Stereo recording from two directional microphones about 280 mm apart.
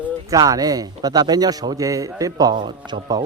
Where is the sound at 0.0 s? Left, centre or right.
Centre.